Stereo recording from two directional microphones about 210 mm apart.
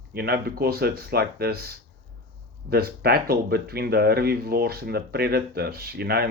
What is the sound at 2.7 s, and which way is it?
Speech, 50° right (ahead or behind).